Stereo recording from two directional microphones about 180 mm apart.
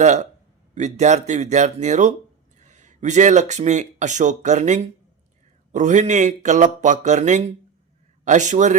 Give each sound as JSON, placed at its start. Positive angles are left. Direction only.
{"t": 0.0, "sound": "a man's voice", "side_deg": -40}